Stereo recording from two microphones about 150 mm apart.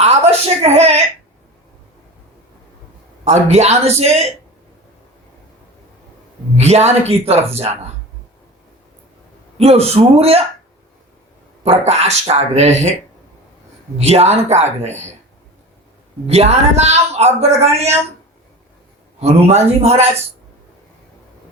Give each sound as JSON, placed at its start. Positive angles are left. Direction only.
{"t": 0.0, "sound": "speech", "side_deg": -45}
{"t": 3.2, "sound": "speech", "side_deg": -45}
{"t": 6.6, "sound": "speech", "side_deg": -45}
{"t": 9.6, "sound": "speech", "side_deg": -45}
{"t": 11.6, "sound": "speech", "side_deg": -45}
{"t": 14.0, "sound": "speech", "side_deg": -45}
{"t": 16.2, "sound": "speech", "side_deg": -45}
{"t": 19.2, "sound": "speech", "side_deg": -45}